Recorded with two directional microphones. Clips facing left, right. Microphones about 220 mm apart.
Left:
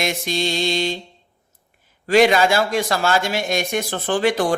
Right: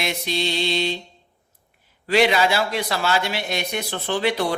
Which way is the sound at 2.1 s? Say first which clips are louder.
Left 4 dB; 45° left (ahead or behind).